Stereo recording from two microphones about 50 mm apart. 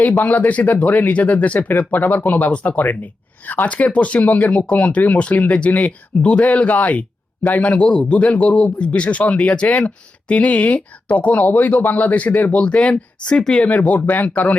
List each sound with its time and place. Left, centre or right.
0.0 s speech: left
12.6 s speech: left